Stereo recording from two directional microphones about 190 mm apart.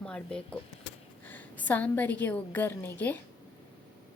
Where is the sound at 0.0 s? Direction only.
5° left (ahead or behind).